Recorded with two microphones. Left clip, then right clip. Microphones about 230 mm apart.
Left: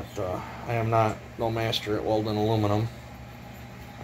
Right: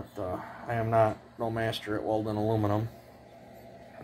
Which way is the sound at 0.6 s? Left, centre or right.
Right.